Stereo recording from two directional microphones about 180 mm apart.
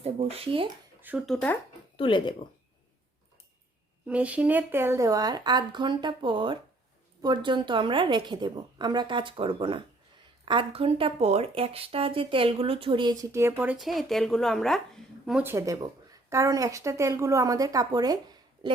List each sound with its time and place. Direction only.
0.0 s speech: 35° right (ahead or behind)
1.0 s speech: 5° right (ahead or behind)
2.0 s speech: 25° left (ahead or behind)
4.0 s a woman's voice: 10° right (ahead or behind); by 13.1 s 25° right (ahead or behind)
13.3 s speech: 15° right (ahead or behind)
13.7 s speech: centre (ahead or behind); by 18.2 s 20° right (ahead or behind)